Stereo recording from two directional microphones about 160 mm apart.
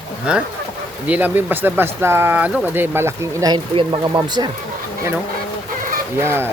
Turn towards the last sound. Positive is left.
turn(degrees=-15)  # may be behind; listen again after turning